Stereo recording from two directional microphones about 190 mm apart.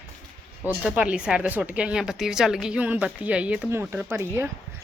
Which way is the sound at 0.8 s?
5° right (ahead or behind).